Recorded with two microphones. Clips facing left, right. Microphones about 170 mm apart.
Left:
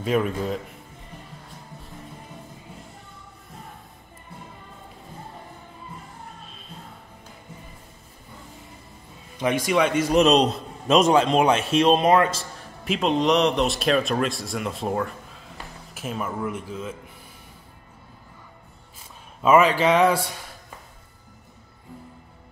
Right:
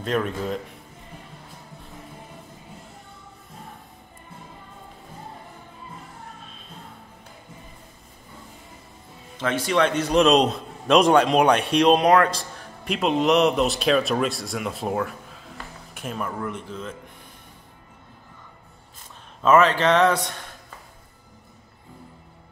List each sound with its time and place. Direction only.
0.0 s a man's voice: 5° left (ahead or behind)
9.4 s a man's voice: 10° left (ahead or behind)
19.4 s a man's voice: 10° left (ahead or behind)